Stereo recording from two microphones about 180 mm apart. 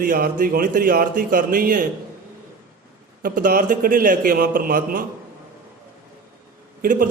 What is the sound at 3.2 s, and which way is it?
A man's voice, 50° right (ahead or behind).